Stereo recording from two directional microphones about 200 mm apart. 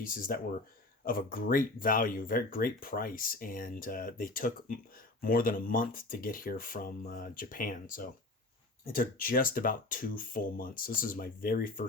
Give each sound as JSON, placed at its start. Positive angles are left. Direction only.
{"t": 0.0, "sound": "speech", "side_deg": 45}